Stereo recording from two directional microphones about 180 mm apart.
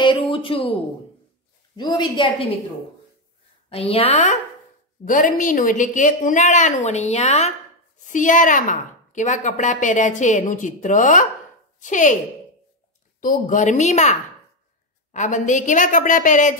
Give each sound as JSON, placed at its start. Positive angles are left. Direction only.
{"t": 0.0, "sound": "a sound", "side_deg": 30}
{"t": 1.8, "sound": "a woman's voice", "side_deg": 25}
{"t": 3.7, "sound": "a woman's voice", "side_deg": 30}
{"t": 13.2, "sound": "a woman's voice", "side_deg": 50}
{"t": 15.1, "sound": "a woman's voice", "side_deg": 45}